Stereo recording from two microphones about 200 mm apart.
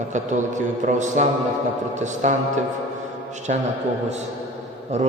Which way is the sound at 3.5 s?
35° right (ahead or behind).